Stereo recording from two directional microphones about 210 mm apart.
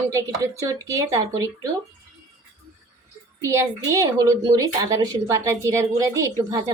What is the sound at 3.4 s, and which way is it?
A woman's voice, 15° right (ahead or behind).